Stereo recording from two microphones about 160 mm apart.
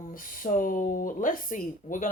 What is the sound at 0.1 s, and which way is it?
Speech, 60° left (ahead or behind).